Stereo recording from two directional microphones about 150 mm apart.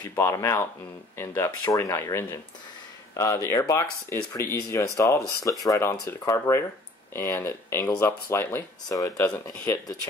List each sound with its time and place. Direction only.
0.1 s speech: 15° left (ahead or behind)
9.3 s speech: 5° left (ahead or behind)